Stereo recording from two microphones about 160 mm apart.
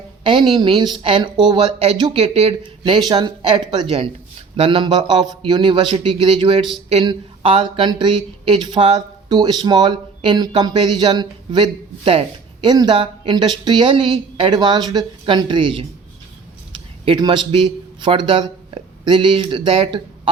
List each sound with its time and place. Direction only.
0.3 s speech: 30° right (ahead or behind)
17.1 s a man's voice: 30° right (ahead or behind)